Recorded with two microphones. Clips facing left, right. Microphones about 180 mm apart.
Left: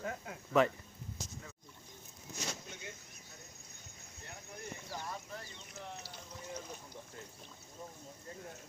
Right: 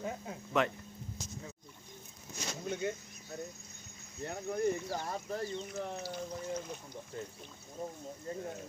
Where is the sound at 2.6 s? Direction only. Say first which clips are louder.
Right 14 dB; 60° right (ahead or behind).